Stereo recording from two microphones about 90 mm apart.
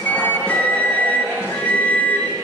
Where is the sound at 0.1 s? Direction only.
15° left (ahead or behind).